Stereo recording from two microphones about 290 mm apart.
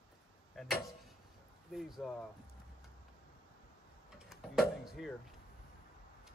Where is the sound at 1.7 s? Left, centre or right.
Centre.